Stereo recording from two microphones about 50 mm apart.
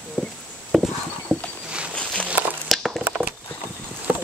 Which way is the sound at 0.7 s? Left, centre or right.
Centre.